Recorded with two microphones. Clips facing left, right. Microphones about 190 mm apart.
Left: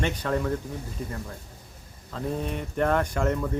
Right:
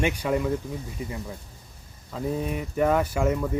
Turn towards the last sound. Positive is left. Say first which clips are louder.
# right 2 dB
turn(degrees=-5)  # may be behind; listen again after turning